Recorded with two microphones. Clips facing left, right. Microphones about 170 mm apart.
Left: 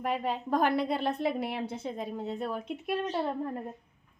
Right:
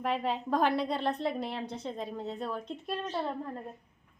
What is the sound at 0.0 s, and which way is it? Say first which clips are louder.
A woman's voice: even; 5° left (ahead or behind).